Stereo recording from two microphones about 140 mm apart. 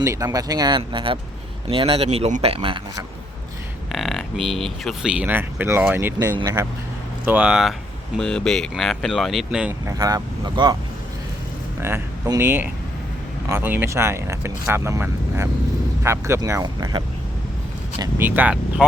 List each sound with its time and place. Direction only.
0.0 s speech: 25° right (ahead or behind); by 2.8 s 40° right (ahead or behind)
3.9 s speech: centre (ahead or behind); by 6.7 s 20° right (ahead or behind)
7.3 s speech: 10° right (ahead or behind)
8.2 s speech: 5° left (ahead or behind)
9.8 s speech: 25° right (ahead or behind)
11.8 s speech: 20° right (ahead or behind)
16.6 s speech: 30° right (ahead or behind)
18.2 s speech: 15° right (ahead or behind)